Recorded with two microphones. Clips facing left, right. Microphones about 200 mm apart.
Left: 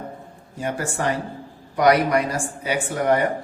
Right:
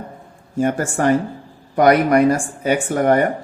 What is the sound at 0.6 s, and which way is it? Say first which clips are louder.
Speech: right 7 dB; 50° right (ahead or behind).